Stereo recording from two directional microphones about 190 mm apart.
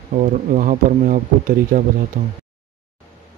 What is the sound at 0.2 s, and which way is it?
Speech, 45° right (ahead or behind).